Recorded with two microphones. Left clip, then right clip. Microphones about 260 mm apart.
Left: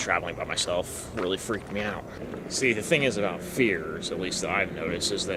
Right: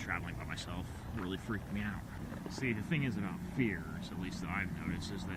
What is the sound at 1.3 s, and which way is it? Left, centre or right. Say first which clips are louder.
Speech: left 12 dB; centre.